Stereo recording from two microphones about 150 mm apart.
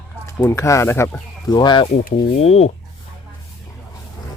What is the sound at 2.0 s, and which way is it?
Speech, 45° left (ahead or behind).